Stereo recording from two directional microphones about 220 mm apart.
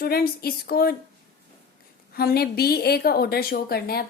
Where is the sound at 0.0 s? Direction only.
45° left (ahead or behind).